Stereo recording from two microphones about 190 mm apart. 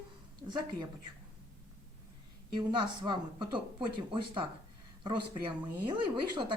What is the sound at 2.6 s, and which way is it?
Speech, 25° right (ahead or behind).